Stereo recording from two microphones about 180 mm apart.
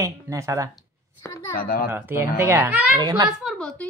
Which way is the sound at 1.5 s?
55° left (ahead or behind).